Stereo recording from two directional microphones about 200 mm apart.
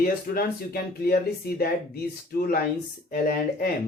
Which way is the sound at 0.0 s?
50° left (ahead or behind).